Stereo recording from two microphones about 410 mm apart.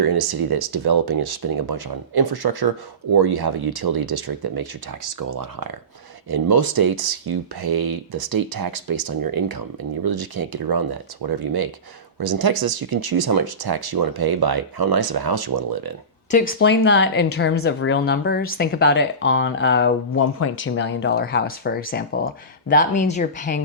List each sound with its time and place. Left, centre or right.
0.0 s speech: right
5.3 s speech: right
6.3 s speech: right
16.3 s speech: left